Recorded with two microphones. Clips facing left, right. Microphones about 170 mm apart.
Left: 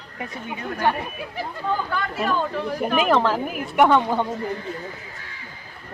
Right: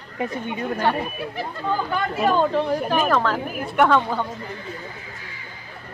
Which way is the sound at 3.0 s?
15° left (ahead or behind).